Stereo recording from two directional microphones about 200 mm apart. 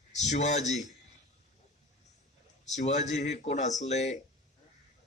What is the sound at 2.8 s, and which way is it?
Speech, 35° left (ahead or behind).